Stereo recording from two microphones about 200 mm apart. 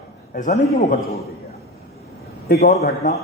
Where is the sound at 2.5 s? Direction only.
50° left (ahead or behind).